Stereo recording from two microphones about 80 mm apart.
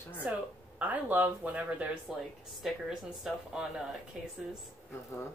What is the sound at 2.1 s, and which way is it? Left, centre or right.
Speech, centre.